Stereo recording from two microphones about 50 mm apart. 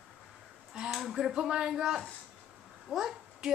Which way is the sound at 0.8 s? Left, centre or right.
Centre.